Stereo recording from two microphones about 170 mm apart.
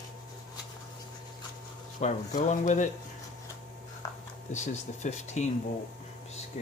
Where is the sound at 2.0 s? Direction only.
45° left (ahead or behind).